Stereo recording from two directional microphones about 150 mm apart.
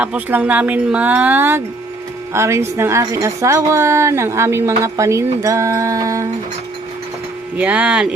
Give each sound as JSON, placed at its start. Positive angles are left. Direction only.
{"t": 0.0, "sound": "a woman's voice", "side_deg": -10}
{"t": 7.5, "sound": "speech", "side_deg": -10}